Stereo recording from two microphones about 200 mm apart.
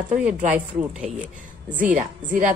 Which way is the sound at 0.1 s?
5° right (ahead or behind).